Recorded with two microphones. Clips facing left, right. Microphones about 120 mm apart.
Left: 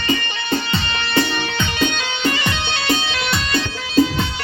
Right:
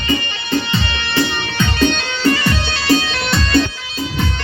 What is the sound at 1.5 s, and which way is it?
Music, 20° left (ahead or behind).